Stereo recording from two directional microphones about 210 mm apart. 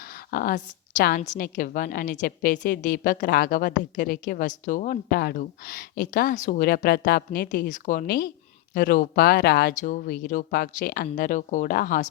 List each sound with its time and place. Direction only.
0.1 s a woman's voice: 45° left (ahead or behind)